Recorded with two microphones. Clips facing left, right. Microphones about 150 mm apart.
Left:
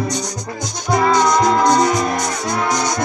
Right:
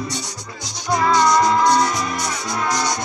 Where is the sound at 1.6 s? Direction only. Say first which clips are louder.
Left 3 dB; 45° left (ahead or behind).